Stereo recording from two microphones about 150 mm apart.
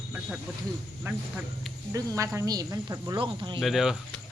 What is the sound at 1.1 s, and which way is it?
Speech, 20° right (ahead or behind).